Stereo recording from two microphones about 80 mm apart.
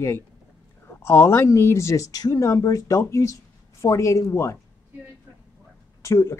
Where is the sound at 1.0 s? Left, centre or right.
Left.